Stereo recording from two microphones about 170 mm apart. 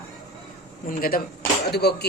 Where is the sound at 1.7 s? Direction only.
75° left (ahead or behind).